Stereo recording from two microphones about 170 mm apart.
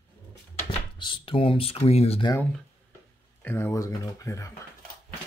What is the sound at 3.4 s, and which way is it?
Speech, 15° left (ahead or behind).